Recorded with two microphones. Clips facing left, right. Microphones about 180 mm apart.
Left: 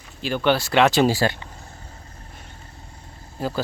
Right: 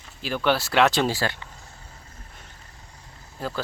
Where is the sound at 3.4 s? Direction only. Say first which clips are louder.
Left 4 dB; 5° left (ahead or behind).